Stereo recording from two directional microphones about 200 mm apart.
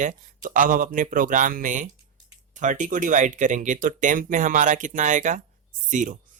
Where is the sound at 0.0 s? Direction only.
40° right (ahead or behind).